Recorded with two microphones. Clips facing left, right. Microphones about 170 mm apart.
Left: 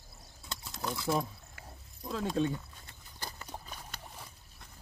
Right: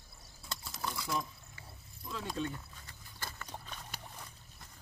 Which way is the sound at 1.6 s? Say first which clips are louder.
Left 6 dB; 45° left (ahead or behind).